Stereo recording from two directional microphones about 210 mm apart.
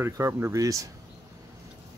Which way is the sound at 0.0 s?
10° right (ahead or behind).